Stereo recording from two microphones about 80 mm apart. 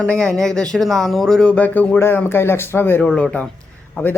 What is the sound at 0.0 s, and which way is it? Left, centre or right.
Speech, centre.